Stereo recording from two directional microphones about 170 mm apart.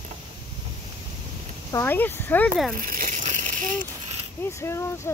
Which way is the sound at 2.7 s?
55° right (ahead or behind).